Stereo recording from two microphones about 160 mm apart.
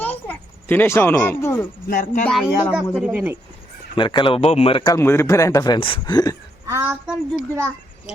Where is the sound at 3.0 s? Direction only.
5° right (ahead or behind).